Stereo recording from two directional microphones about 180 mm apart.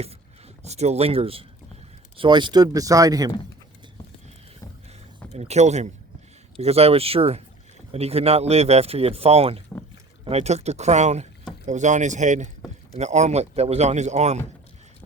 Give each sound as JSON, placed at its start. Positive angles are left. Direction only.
{"t": 0.6, "sound": "speech", "side_deg": -40}
{"t": 5.3, "sound": "speech", "side_deg": -35}